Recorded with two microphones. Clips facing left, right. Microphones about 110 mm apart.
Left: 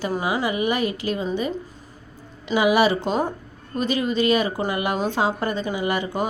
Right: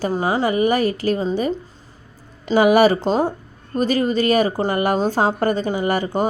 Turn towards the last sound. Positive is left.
turn(degrees=-40)  # may be behind; listen again after turning